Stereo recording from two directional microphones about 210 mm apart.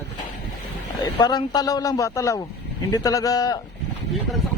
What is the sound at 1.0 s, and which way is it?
Speech, 20° left (ahead or behind).